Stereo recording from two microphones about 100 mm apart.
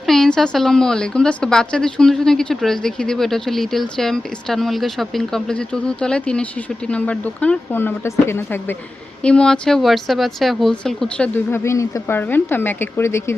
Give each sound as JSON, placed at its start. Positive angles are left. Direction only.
{"t": 0.0, "sound": "a woman's voice", "side_deg": 5}
{"t": 9.2, "sound": "speech", "side_deg": 10}
{"t": 11.5, "sound": "speech", "side_deg": 30}